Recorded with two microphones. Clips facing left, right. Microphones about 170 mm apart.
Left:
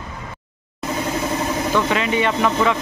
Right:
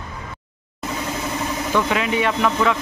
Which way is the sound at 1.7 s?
5° right (ahead or behind).